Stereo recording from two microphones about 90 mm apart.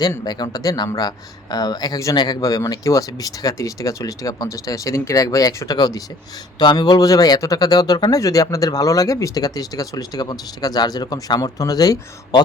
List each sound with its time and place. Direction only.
0.3 s speech: 50° left (ahead or behind)